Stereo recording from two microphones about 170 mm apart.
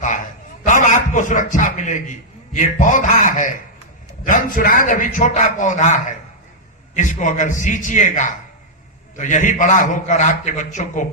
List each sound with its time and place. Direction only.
0.7 s a man's voice: 45° left (ahead or behind)